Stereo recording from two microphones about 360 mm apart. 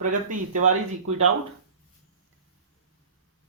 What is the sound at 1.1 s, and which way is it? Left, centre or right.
Speech, right.